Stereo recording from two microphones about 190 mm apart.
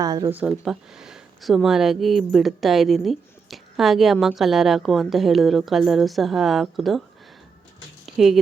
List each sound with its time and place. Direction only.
0.0 s speech: 20° right (ahead or behind)
0.4 s speech: centre (ahead or behind)
8.0 s a sound: centre (ahead or behind)